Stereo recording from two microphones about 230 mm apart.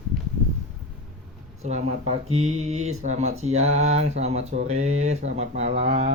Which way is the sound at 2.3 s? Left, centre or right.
Right.